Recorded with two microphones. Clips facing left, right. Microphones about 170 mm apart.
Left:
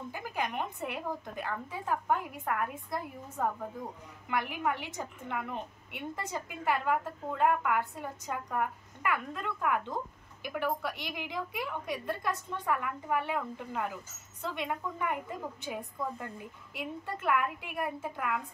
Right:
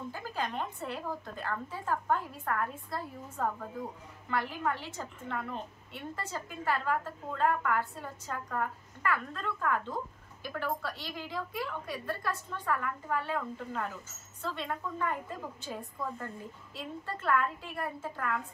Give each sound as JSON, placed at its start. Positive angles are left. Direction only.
{"t": 0.1, "sound": "a woman's voice", "side_deg": 15}